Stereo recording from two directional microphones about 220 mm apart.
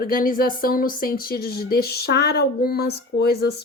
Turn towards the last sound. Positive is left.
turn(degrees=45)  # may be behind; listen again after turning